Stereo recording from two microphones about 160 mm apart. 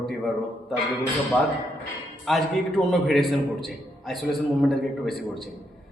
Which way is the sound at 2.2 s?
Centre (ahead or behind).